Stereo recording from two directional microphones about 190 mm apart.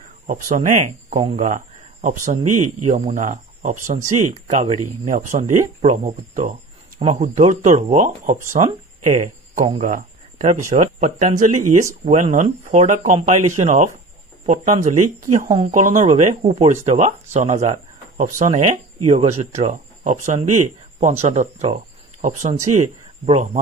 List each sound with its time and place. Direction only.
0.0 s speech: 40° right (ahead or behind)